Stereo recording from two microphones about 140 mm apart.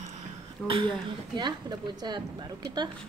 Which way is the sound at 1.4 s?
30° right (ahead or behind).